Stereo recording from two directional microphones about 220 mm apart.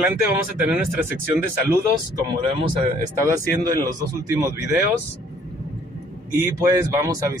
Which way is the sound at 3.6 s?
15° right (ahead or behind).